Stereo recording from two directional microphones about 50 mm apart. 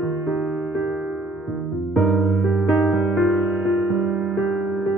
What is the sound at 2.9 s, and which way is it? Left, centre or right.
Music, centre.